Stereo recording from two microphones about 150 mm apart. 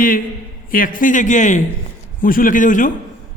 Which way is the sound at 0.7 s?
65° left (ahead or behind).